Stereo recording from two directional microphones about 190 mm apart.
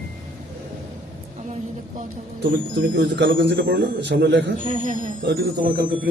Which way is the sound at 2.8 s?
70° right (ahead or behind).